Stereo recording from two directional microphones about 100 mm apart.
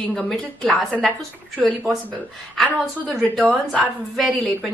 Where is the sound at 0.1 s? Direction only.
10° left (ahead or behind).